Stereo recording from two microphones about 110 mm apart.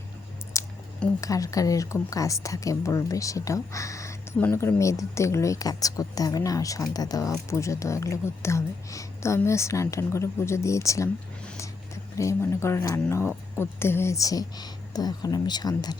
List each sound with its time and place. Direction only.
0.5 s a sound: 25° left (ahead or behind)
1.2 s speech: 30° left (ahead or behind)
12.1 s speech: 30° left (ahead or behind)